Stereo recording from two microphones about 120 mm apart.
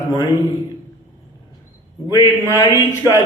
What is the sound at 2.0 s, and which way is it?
A man's voice, 25° left (ahead or behind).